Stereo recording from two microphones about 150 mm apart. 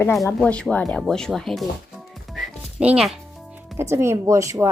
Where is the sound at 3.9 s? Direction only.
15° right (ahead or behind).